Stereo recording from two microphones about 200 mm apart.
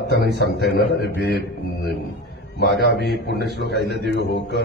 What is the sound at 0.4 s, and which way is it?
Mantra, 55° left (ahead or behind).